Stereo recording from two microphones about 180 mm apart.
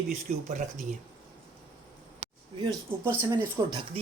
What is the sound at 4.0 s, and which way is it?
Speech, 35° right (ahead or behind).